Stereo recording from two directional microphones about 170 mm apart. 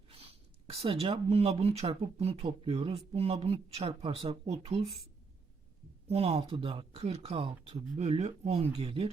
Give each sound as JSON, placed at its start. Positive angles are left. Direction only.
{"t": 0.1, "sound": "speech", "side_deg": -35}
{"t": 6.1, "sound": "speech", "side_deg": -35}